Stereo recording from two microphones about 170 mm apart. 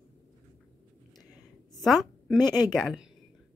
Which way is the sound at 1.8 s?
Centre (ahead or behind).